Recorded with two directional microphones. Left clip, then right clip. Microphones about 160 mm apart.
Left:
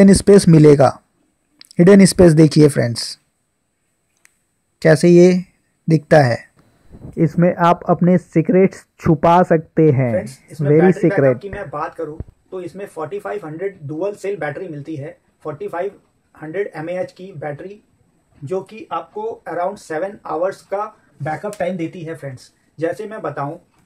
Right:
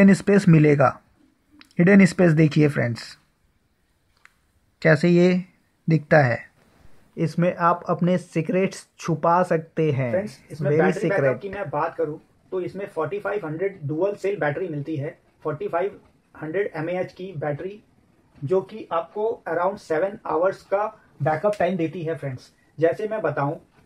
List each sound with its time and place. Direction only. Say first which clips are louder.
0.0 s speech: left 8 dB; 40° left (ahead or behind)
4.7 s speech: left 8 dB; 35° left (ahead or behind)
7.2 s speech: left 7 dB; 10° left (ahead or behind)
19.4 s speech: left 2 dB; 5° left (ahead or behind)